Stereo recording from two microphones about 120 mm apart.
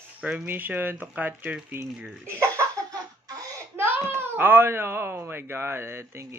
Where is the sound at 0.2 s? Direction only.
10° right (ahead or behind).